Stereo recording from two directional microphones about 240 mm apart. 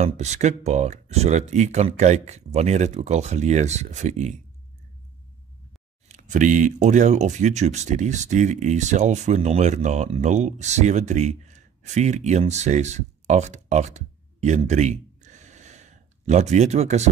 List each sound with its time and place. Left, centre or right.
0.0 s speech: right
6.0 s speech: right